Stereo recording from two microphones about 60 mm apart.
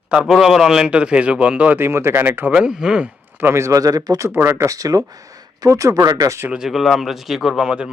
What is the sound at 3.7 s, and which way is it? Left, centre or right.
Speech, right.